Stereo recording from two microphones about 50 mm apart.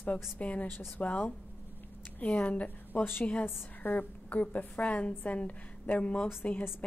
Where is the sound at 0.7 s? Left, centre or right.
Left.